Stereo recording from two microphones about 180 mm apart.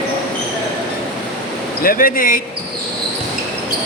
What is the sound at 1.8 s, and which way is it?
Speech, 50° left (ahead or behind).